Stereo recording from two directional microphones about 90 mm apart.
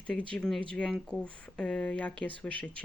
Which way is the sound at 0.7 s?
10° left (ahead or behind).